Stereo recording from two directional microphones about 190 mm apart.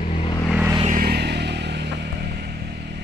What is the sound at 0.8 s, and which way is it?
Vehicle, 50° right (ahead or behind).